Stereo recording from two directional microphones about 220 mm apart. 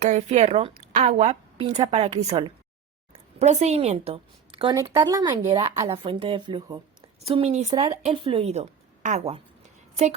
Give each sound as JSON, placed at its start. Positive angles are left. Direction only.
{"t": 0.0, "sound": "a woman's voice", "side_deg": -30}